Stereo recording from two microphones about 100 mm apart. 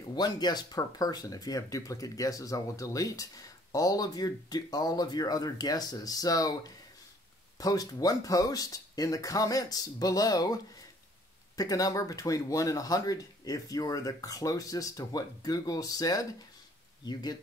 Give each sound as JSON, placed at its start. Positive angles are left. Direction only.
{"t": 0.1, "sound": "speech", "side_deg": 45}